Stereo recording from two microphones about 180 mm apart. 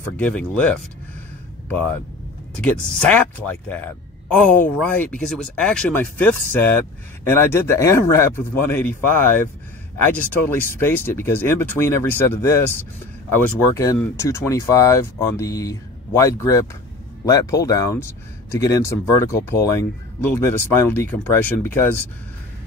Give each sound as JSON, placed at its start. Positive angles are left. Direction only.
{"t": 0.0, "sound": "a man's voice", "side_deg": 5}
{"t": 2.6, "sound": "a man's voice", "side_deg": 5}